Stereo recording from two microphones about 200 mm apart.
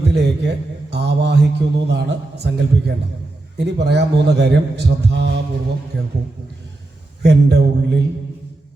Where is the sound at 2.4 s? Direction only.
60° right (ahead or behind).